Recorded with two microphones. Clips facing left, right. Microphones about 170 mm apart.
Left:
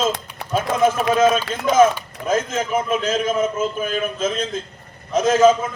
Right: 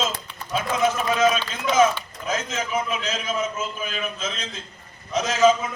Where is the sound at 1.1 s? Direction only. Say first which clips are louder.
Left 4 dB; 50° left (ahead or behind).